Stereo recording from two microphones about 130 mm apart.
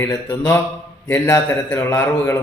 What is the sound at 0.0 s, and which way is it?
A man's voice, 20° left (ahead or behind).